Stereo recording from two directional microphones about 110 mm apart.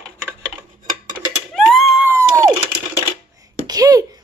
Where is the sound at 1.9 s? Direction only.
25° right (ahead or behind).